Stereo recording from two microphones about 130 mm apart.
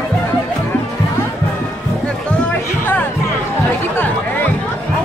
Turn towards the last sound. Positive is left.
turn(degrees=15)  # may be behind; listen again after turning